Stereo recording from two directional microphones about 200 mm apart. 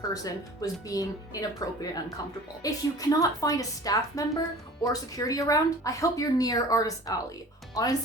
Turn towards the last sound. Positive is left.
turn(degrees=15)  # may be behind; listen again after turning